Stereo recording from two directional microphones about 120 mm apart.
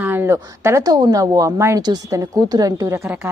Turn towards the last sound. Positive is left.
turn(degrees=-25)  # may be behind; listen again after turning